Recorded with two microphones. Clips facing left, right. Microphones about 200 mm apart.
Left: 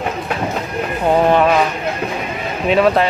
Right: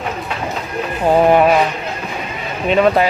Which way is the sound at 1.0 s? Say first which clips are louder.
Right 2 dB; 15° right (ahead or behind).